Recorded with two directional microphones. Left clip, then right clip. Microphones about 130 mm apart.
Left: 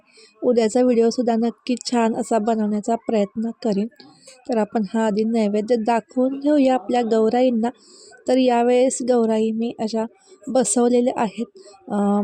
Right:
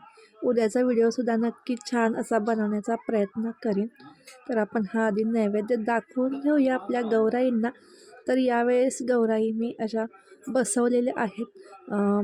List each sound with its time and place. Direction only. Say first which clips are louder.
0.4 s speech: left 6 dB; 35° left (ahead or behind)